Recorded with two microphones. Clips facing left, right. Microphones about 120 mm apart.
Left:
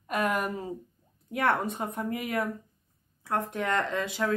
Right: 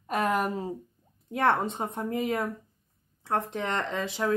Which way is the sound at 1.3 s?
25° right (ahead or behind).